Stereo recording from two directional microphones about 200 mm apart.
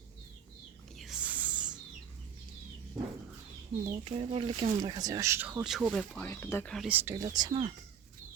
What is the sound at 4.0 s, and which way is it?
Speech, 30° right (ahead or behind).